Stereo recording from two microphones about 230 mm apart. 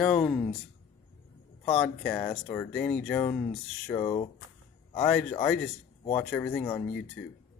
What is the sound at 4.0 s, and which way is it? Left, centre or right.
Speech, left.